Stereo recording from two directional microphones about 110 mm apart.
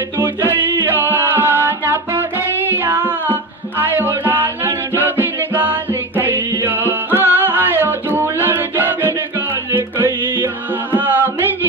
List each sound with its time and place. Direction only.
0.2 s music: 20° right (ahead or behind)